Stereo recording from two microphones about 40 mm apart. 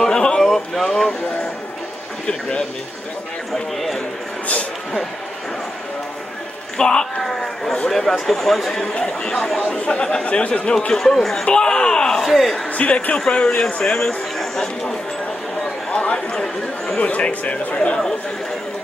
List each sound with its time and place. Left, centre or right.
0.0 s a sound: centre
0.4 s a sound: centre
6.8 s speech: centre
7.2 s a sound: centre
7.9 s speech: centre
8.9 s speech: left
11.0 s speech: centre
12.2 s speech: centre
12.7 s speech: left; by 14.1 s centre
14.4 s speech: centre
15.9 s speech: left